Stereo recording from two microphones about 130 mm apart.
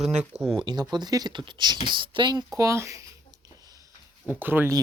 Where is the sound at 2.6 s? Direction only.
25° right (ahead or behind).